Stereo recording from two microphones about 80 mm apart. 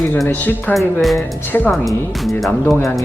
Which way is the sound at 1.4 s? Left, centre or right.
Left.